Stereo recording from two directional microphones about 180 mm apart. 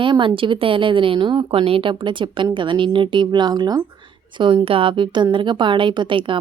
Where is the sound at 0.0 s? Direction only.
25° right (ahead or behind).